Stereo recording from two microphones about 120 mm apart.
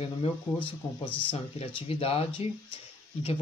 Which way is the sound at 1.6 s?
55° left (ahead or behind).